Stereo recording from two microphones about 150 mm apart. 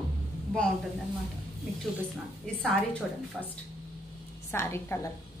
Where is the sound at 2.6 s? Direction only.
10° left (ahead or behind).